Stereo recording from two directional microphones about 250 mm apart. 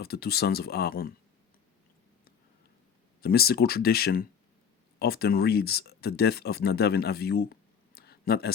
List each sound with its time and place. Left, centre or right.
0.0 s speech: left
3.2 s speech: left